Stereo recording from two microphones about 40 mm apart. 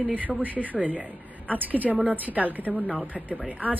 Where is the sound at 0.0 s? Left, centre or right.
Right.